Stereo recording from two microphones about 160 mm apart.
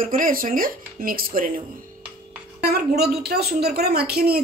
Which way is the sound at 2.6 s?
75° right (ahead or behind).